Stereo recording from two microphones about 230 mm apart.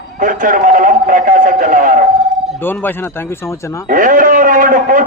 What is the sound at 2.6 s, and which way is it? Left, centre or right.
A man's voice, centre.